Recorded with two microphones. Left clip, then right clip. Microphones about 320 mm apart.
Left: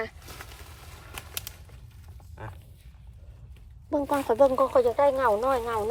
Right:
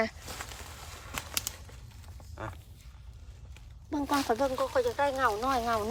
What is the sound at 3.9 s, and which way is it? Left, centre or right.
Speech, centre.